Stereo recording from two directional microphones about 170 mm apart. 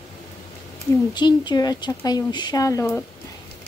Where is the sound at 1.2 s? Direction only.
25° left (ahead or behind).